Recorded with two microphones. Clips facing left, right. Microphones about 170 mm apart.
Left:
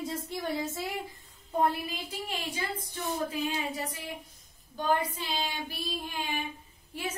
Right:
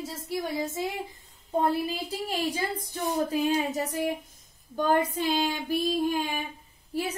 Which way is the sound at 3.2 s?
40° right (ahead or behind).